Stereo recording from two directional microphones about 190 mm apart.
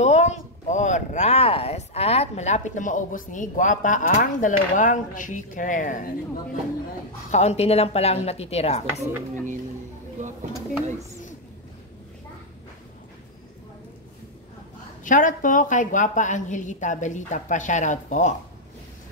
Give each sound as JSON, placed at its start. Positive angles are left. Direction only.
{"t": 0.0, "sound": "speech", "side_deg": 40}
{"t": 7.2, "sound": "a woman's voice", "side_deg": 35}
{"t": 15.0, "sound": "a woman's voice", "side_deg": 45}